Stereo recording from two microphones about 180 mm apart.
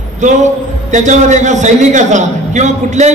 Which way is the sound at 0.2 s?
40° right (ahead or behind).